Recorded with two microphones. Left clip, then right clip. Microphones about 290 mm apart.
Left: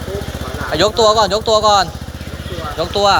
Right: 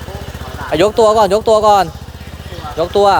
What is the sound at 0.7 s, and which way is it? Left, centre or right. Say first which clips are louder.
Speech: right 2 dB; right.